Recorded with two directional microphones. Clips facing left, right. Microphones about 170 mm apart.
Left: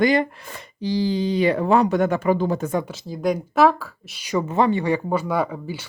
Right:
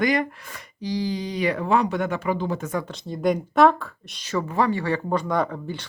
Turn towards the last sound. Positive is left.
turn(degrees=5)  # may be behind; listen again after turning